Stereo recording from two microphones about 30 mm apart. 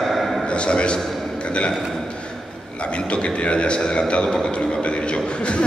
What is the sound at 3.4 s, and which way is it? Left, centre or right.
Speech, left.